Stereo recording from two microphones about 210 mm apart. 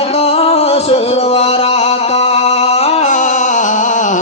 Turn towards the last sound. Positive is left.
turn(degrees=35)  # may be behind; listen again after turning